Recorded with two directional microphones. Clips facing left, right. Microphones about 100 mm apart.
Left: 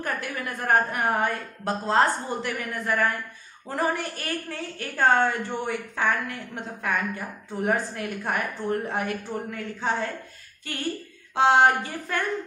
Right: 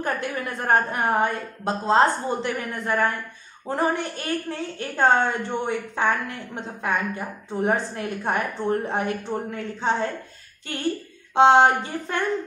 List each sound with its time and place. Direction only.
0.0 s a woman's voice: 25° right (ahead or behind)
11.3 s a woman's voice: 25° right (ahead or behind)